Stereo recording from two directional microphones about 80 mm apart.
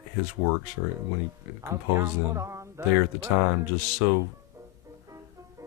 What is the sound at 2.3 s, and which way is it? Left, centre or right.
Music, right.